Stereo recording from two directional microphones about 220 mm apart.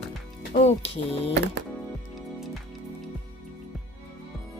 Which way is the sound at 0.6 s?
30° left (ahead or behind).